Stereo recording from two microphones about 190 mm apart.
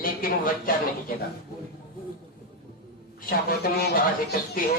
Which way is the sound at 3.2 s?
55° left (ahead or behind).